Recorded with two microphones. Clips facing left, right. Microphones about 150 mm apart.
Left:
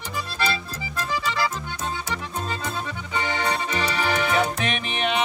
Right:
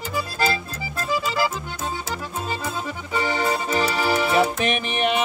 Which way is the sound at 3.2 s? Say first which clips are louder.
Right 3 dB; 35° right (ahead or behind).